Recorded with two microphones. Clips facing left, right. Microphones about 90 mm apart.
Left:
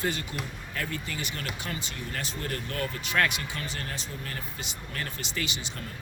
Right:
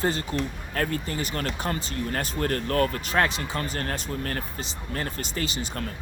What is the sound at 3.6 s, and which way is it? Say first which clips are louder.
Speech: right 7 dB; 45° right (ahead or behind).